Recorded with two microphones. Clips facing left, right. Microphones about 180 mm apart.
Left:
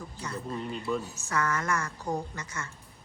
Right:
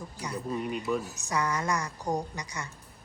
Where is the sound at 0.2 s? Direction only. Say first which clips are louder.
Right 3 dB; 15° right (ahead or behind).